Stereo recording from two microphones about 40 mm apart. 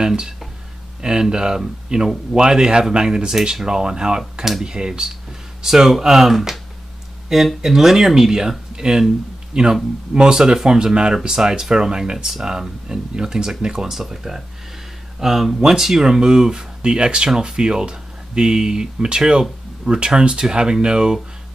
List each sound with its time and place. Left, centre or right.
0.0 s speech: centre
1.3 s speech: centre